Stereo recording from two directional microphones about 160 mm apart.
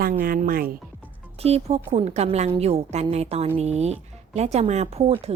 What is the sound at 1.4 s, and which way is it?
A woman's voice, 40° right (ahead or behind).